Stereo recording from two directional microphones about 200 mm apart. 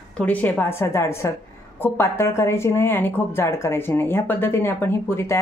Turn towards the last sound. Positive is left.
turn(degrees=15)  # may be behind; listen again after turning